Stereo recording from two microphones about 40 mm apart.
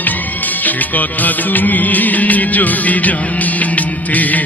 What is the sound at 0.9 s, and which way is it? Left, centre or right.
Music, left.